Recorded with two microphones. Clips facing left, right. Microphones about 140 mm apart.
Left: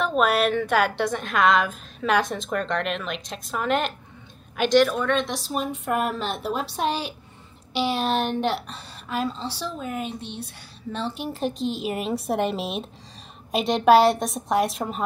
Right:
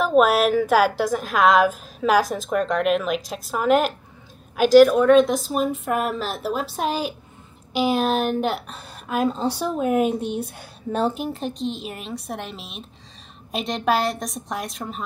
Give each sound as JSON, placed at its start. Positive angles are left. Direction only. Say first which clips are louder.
{"t": 0.0, "sound": "a woman's voice", "louder": "right 4 dB", "side_deg": -5}
{"t": 9.2, "sound": "speech", "louder": "right 8 dB", "side_deg": -50}
{"t": 9.8, "sound": "a woman's voice", "louder": "right 10 dB", "side_deg": -5}